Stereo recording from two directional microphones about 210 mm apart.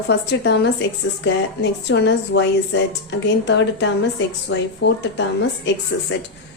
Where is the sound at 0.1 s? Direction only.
55° left (ahead or behind).